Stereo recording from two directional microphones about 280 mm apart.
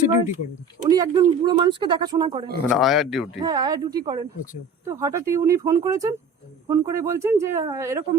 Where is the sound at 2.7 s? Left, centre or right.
Centre.